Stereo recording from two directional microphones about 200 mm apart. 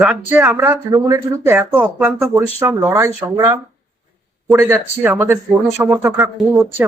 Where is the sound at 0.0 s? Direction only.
5° right (ahead or behind).